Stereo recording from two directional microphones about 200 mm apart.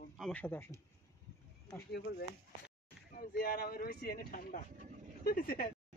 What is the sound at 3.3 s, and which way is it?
Speech, 50° left (ahead or behind).